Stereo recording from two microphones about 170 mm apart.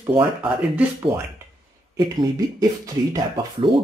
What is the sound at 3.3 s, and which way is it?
Speech, 30° right (ahead or behind).